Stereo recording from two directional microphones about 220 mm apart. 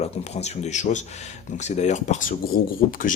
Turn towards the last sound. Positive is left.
turn(degrees=40)  # may be behind; listen again after turning